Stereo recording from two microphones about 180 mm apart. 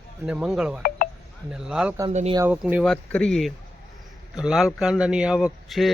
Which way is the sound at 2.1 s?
35° right (ahead or behind).